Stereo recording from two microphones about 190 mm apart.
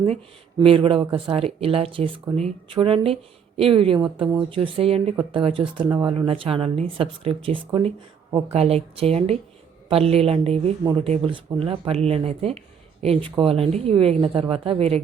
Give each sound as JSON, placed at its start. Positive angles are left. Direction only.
{"t": 0.6, "sound": "speech", "side_deg": -30}